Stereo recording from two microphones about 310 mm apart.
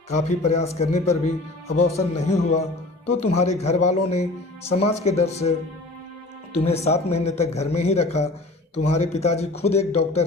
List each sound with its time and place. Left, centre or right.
0.3 s speech: left